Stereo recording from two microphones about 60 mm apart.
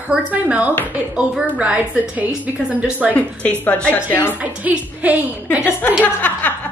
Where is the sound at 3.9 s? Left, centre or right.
Left.